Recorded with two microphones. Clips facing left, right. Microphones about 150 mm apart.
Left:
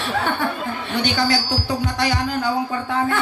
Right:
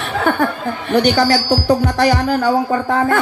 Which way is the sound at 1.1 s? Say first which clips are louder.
Right 6 dB; 45° right (ahead or behind).